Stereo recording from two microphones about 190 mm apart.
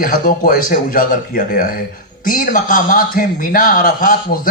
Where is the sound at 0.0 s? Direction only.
50° left (ahead or behind).